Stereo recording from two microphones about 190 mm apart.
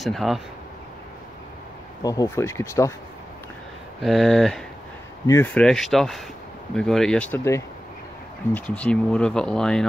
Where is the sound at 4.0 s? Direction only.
Centre (ahead or behind).